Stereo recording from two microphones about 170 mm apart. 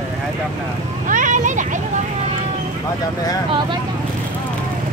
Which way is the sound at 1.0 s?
50° right (ahead or behind).